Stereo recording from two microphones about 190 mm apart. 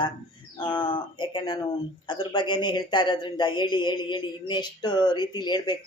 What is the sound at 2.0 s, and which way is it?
Speech, 25° left (ahead or behind).